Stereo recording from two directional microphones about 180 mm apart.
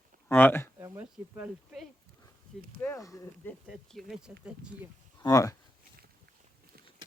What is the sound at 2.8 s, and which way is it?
Speech, 15° left (ahead or behind).